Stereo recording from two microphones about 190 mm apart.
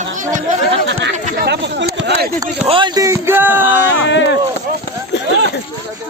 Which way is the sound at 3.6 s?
70° left (ahead or behind).